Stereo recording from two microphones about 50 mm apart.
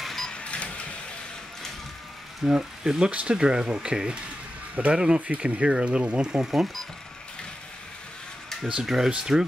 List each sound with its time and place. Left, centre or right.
0.0 s printer: centre
0.3 s printer: left
2.4 s speech: centre
3.1 s speech: right
5.2 s speech: right; by 6.8 s centre
8.8 s speech: centre